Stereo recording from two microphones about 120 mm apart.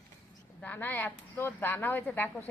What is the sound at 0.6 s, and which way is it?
Speech, 15° left (ahead or behind).